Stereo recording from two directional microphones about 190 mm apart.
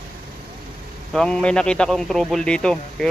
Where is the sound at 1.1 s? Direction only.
5° left (ahead or behind).